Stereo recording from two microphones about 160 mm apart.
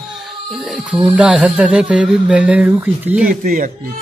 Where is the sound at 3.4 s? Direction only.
65° right (ahead or behind).